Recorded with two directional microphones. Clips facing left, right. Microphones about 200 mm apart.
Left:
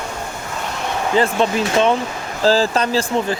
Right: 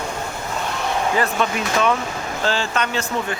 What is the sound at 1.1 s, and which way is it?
Speech, 30° left (ahead or behind).